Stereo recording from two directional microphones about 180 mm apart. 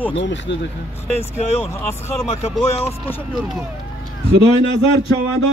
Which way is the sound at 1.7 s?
15° left (ahead or behind).